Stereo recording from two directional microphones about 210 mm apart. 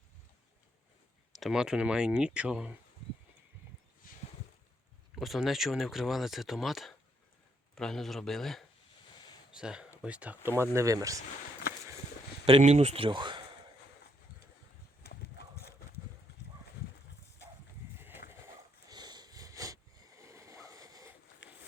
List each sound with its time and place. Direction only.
1.3 s speech: centre (ahead or behind)
5.1 s speech: centre (ahead or behind)
12.5 s speech: 30° right (ahead or behind)
15.0 s a sound: 50° left (ahead or behind)
18.9 s a sound: 20° right (ahead or behind)
21.4 s run: 60° left (ahead or behind)